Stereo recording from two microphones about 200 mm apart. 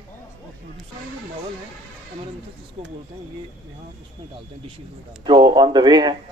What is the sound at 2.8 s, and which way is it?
Speech, 25° right (ahead or behind).